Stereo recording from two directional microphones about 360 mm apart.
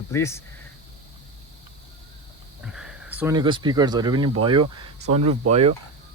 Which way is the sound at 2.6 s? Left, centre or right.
Centre.